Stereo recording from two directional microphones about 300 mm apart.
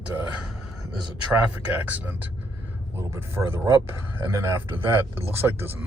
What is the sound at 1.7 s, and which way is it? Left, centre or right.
Speech, centre.